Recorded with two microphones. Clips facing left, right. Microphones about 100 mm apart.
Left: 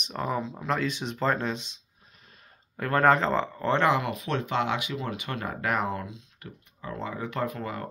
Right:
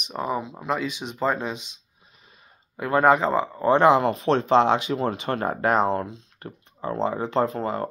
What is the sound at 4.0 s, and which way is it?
Speech, 35° right (ahead or behind).